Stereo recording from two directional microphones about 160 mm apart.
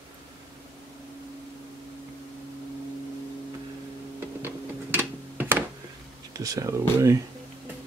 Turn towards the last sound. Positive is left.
turn(degrees=-20)  # may be behind; listen again after turning